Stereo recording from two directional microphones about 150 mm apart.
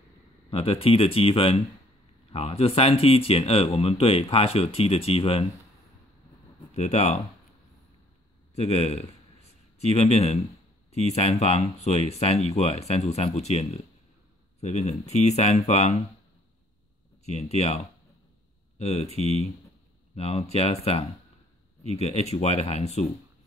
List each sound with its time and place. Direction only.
0.5 s speech: 40° left (ahead or behind)
6.7 s speech: 50° left (ahead or behind)
8.5 s a man's voice: 45° left (ahead or behind)
17.2 s speech: 45° left (ahead or behind)